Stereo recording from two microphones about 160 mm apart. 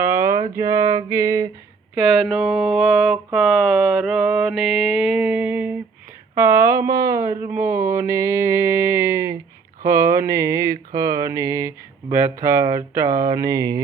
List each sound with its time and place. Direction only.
0.0 s music: 15° right (ahead or behind)
2.2 s mantra: 5° right (ahead or behind)
6.3 s speech: 15° right (ahead or behind)